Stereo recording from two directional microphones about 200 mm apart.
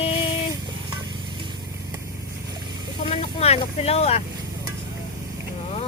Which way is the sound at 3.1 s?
30° left (ahead or behind).